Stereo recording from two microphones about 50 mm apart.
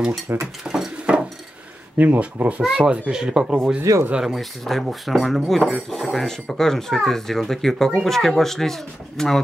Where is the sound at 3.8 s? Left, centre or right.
Right.